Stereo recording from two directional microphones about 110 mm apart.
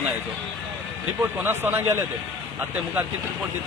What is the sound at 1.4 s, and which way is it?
Speech, 20° right (ahead or behind).